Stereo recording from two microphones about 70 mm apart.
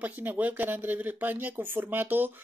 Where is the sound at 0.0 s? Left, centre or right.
Right.